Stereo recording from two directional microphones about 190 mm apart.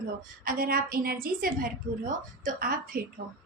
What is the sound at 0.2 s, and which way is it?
Child singing, 50° right (ahead or behind).